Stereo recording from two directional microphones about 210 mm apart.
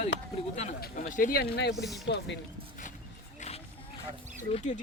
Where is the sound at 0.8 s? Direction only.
40° left (ahead or behind).